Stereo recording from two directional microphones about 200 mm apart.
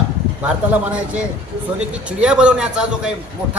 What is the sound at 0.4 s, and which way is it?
A man's voice, 5° right (ahead or behind).